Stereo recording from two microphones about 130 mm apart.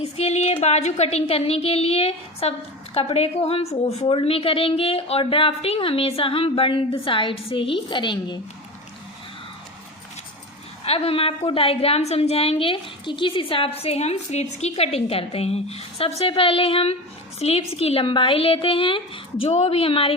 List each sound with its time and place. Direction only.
0.0 s a woman's voice: 55° left (ahead or behind); by 8.4 s 35° left (ahead or behind)
10.8 s a woman's voice: 50° left (ahead or behind)